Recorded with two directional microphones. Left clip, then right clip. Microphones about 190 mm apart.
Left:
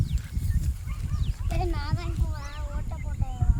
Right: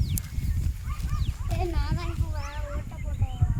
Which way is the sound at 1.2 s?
Centre (ahead or behind).